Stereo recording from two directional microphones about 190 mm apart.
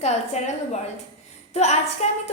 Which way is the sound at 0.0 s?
35° left (ahead or behind).